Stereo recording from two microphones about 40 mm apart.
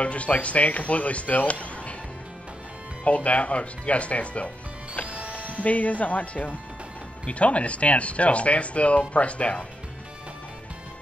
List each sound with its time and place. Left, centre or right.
0.0 s speech: left
3.0 s speech: left
5.0 s music: right
5.6 s speech: left